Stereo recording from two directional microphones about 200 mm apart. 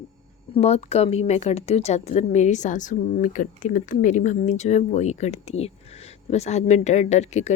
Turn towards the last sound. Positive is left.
turn(degrees=35)  # may be behind; listen again after turning